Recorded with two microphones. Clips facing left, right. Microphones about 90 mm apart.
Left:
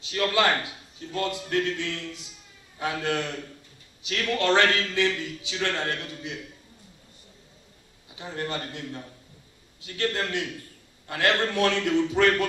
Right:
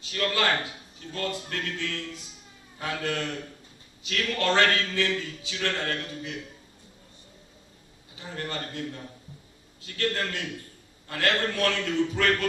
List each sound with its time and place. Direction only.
0.0 s a man's voice: 20° left (ahead or behind)
8.2 s a man's voice: 20° left (ahead or behind)